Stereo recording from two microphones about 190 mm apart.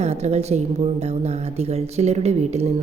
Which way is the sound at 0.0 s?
35° right (ahead or behind).